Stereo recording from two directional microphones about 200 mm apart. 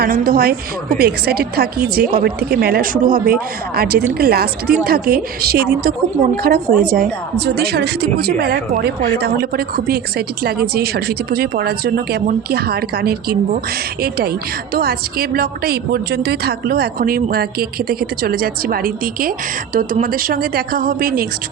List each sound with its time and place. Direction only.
0.0 s a woman's voice: 45° right (ahead or behind)